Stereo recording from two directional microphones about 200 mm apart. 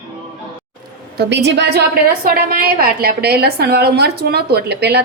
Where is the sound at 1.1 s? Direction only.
55° right (ahead or behind).